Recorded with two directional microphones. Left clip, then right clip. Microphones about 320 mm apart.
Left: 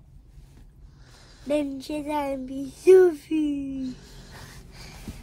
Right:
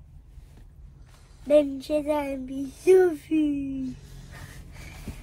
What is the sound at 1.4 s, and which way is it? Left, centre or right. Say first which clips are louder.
Speech: right 6 dB; centre.